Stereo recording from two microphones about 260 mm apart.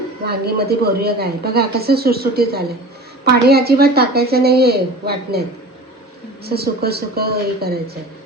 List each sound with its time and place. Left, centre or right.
0.3 s speech: right
6.4 s speech: right